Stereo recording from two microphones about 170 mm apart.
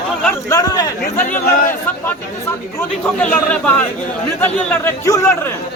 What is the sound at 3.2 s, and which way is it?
Speech, 5° left (ahead or behind).